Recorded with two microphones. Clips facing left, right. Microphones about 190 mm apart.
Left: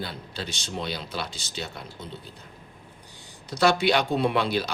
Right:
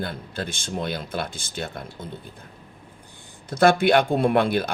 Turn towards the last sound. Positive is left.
turn(degrees=-55)  # may be behind; listen again after turning